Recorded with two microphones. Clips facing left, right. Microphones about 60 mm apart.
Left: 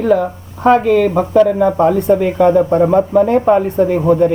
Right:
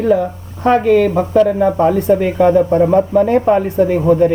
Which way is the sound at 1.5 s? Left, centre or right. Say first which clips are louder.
Left 1 dB; centre.